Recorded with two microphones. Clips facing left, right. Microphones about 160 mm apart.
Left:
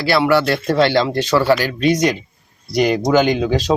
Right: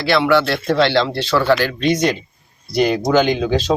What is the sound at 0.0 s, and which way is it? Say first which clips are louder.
Speech: even; 10° left (ahead or behind).